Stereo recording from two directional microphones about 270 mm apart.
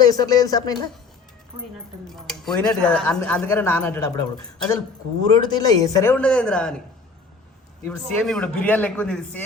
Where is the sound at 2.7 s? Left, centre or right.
Centre.